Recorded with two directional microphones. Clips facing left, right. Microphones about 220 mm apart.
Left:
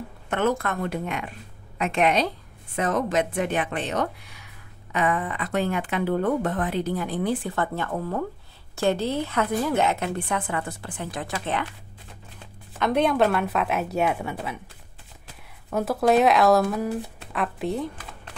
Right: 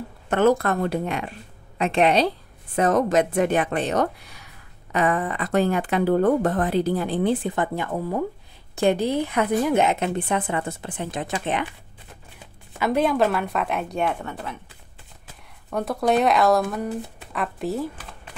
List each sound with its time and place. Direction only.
0.3 s a woman's voice: 35° right (ahead or behind); by 11.6 s 20° right (ahead or behind)
12.7 s speech: 5° right (ahead or behind)
15.7 s speech: 5° left (ahead or behind)